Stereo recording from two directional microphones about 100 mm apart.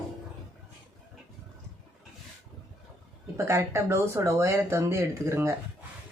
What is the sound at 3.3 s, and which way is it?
Speech, 30° right (ahead or behind).